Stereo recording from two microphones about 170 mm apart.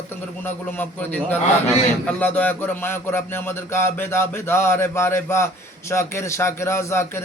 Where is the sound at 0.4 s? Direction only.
10° left (ahead or behind).